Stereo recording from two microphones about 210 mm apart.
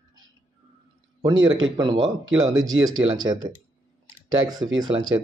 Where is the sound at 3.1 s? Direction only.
20° right (ahead or behind).